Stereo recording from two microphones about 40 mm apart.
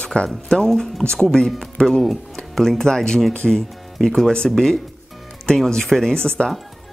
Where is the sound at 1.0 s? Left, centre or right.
Left.